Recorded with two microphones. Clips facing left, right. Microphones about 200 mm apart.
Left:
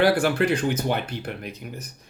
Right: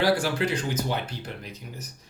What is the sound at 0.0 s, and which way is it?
Speech, 60° left (ahead or behind).